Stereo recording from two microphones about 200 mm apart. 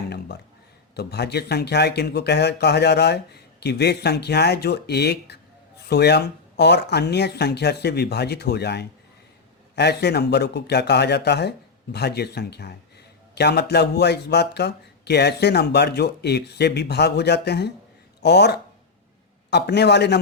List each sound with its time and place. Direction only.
0.9 s speech: 55° left (ahead or behind)